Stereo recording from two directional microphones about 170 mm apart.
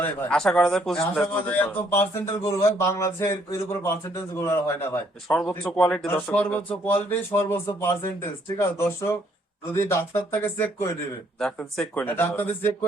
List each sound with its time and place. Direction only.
0.0 s a man's voice: 5° left (ahead or behind)
11.3 s a man's voice: 5° left (ahead or behind)